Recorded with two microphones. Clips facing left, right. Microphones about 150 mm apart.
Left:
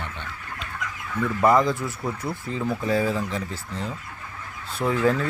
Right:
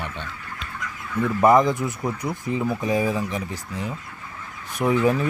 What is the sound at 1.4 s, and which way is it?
Speech, 20° right (ahead or behind).